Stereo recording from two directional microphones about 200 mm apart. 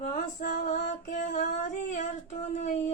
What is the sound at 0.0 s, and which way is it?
Music, 40° left (ahead or behind).